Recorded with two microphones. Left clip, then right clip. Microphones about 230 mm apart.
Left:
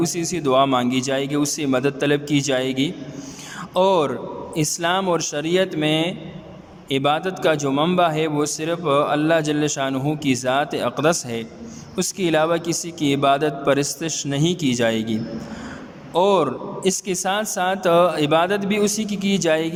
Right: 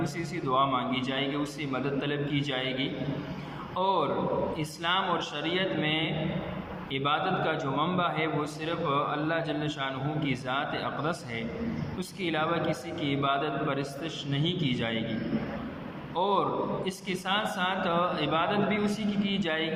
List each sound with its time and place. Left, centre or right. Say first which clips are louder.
0.0 s a man's voice: left 11 dB; left
16.1 s a man's voice: left 9 dB; left